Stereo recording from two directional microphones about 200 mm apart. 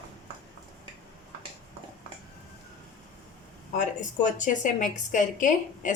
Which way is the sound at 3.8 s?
40° left (ahead or behind).